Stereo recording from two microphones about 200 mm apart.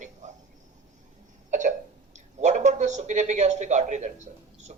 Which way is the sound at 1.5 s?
40° right (ahead or behind).